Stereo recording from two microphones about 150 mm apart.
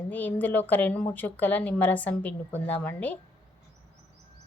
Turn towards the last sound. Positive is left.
turn(degrees=10)  # may be behind; listen again after turning